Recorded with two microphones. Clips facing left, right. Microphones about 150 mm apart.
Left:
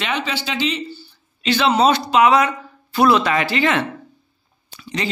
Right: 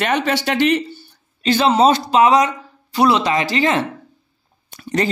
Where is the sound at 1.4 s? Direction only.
35° right (ahead or behind).